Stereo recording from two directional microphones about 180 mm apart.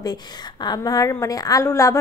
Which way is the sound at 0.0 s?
25° left (ahead or behind).